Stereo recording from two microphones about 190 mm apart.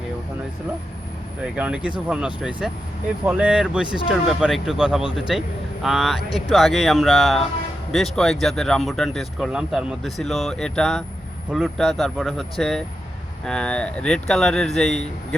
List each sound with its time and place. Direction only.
1.4 s speech: 5° right (ahead or behind)